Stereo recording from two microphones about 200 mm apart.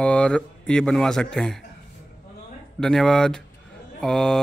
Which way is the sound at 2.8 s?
Centre (ahead or behind).